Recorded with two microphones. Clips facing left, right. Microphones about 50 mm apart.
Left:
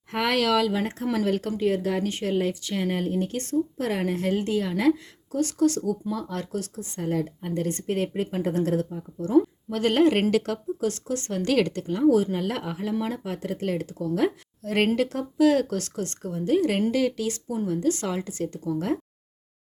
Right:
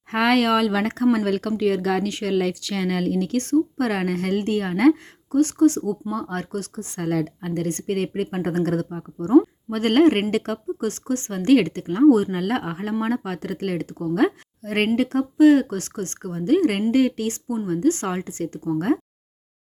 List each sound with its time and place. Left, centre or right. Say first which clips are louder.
0.1 s a woman's voice: right 4 dB; right
0.7 s speech: right 4 dB; right
1.1 s speech: right 3 dB; right
3.4 s a woman's voice: right 5 dB; right
6.1 s a woman's voice: right 3 dB; right
6.9 s a woman's voice: right 3 dB; right